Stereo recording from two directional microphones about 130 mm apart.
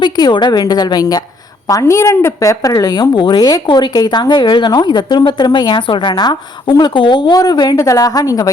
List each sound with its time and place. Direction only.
0.0 s a woman's voice: 35° left (ahead or behind)